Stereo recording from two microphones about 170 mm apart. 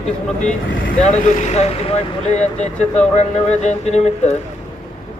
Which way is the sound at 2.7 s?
5° left (ahead or behind).